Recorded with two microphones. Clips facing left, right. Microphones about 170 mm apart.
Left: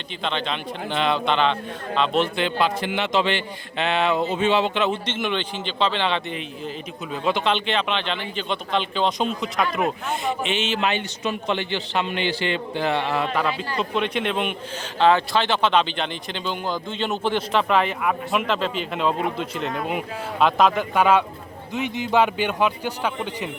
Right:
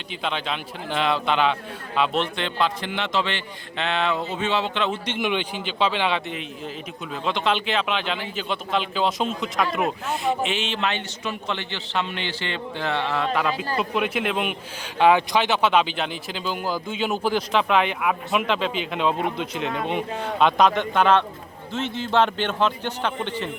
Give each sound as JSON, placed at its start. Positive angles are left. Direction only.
{"t": 0.2, "sound": "a man's voice", "side_deg": -5}
{"t": 5.0, "sound": "a man's voice", "side_deg": -10}
{"t": 13.7, "sound": "a man's voice", "side_deg": -5}